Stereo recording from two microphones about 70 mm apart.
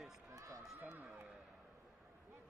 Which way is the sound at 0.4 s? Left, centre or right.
Right.